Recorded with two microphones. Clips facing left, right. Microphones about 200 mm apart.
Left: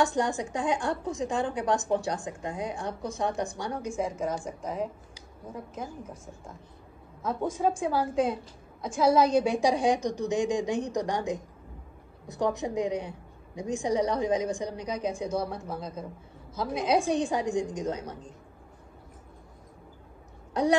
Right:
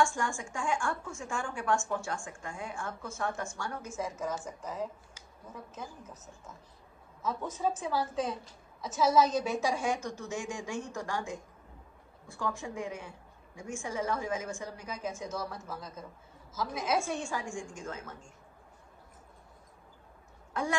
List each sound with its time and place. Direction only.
0.0 s a woman's voice: 20° left (ahead or behind)
7.2 s a woman's voice: 10° left (ahead or behind)
9.3 s a woman's voice: 15° left (ahead or behind)
15.1 s a woman's voice: 30° left (ahead or behind)
16.8 s a woman's voice: 15° left (ahead or behind)